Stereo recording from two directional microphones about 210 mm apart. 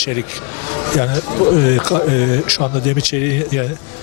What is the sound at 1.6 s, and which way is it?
Speech, 20° left (ahead or behind).